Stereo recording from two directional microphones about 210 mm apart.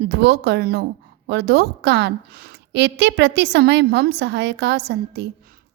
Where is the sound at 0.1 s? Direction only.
55° right (ahead or behind).